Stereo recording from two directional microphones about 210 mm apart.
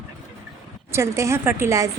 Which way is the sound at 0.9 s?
15° right (ahead or behind).